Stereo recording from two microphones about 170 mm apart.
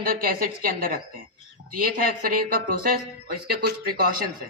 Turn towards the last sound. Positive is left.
turn(degrees=-60)  # may be behind; listen again after turning